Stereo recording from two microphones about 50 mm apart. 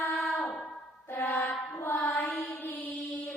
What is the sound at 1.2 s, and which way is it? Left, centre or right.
Mantra, left.